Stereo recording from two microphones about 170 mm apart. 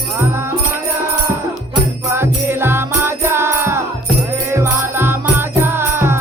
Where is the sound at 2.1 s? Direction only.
15° right (ahead or behind).